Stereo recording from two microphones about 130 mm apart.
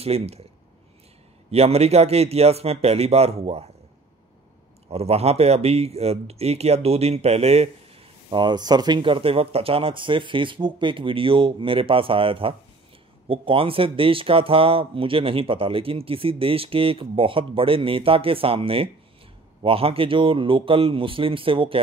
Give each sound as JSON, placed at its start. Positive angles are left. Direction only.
{"t": 0.0, "sound": "speech", "side_deg": -50}
{"t": 1.5, "sound": "speech", "side_deg": -50}
{"t": 4.8, "sound": "speech", "side_deg": -50}